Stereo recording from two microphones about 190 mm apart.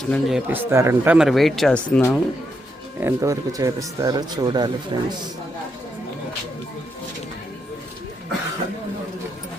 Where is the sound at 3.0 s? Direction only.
15° right (ahead or behind).